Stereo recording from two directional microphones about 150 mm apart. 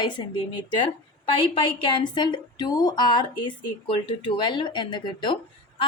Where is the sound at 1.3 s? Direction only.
35° left (ahead or behind).